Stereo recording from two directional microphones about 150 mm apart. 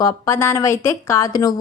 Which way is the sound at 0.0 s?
20° left (ahead or behind).